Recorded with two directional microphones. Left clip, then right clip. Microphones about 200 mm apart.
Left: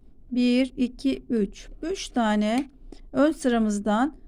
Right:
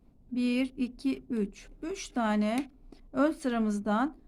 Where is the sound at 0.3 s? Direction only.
25° left (ahead or behind).